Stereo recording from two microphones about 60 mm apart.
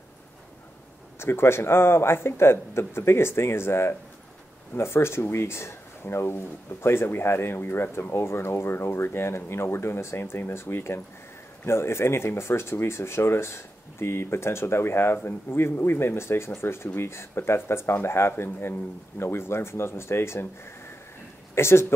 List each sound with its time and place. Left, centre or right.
1.2 s speech: left
21.5 s speech: left